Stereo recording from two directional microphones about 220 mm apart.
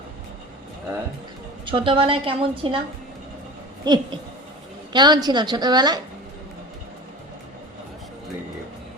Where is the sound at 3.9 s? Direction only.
20° right (ahead or behind).